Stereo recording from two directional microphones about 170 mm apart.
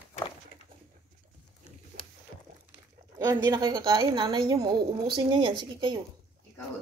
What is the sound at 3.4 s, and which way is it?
A woman's voice, 25° right (ahead or behind).